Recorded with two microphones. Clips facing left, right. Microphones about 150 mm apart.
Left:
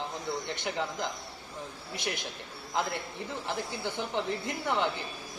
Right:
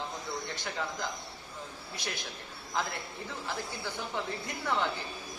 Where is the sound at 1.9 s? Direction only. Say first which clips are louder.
Left 4 dB; 20° left (ahead or behind).